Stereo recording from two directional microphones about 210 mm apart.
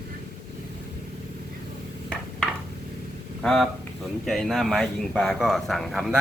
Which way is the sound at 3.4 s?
Centre (ahead or behind).